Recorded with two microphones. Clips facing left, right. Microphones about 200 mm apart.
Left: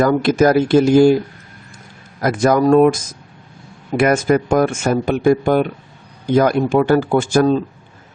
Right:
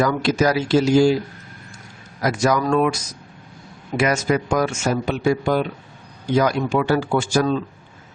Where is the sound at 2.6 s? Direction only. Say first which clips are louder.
Left 8 dB; 45° left (ahead or behind).